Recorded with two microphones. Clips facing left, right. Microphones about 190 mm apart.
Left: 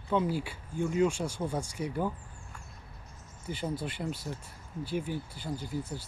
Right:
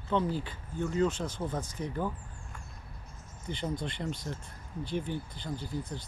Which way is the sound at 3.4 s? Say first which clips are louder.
Even; 5° left (ahead or behind).